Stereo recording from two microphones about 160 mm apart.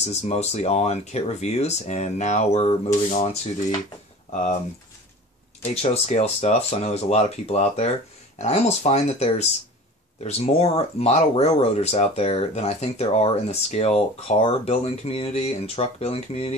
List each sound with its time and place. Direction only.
0.0 s speech: 45° left (ahead or behind)
4.3 s speech: 50° left (ahead or behind)
5.8 s speech: 45° left (ahead or behind)